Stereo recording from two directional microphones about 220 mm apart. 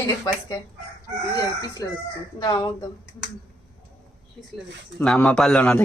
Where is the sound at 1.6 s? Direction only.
15° left (ahead or behind).